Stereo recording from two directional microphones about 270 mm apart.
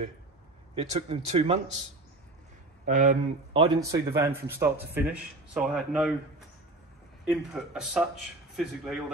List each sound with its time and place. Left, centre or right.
0.7 s speech: right
2.8 s speech: right
3.6 s a man's voice: centre
7.2 s speech: centre